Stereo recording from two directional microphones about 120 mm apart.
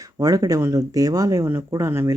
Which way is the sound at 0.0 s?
30° right (ahead or behind).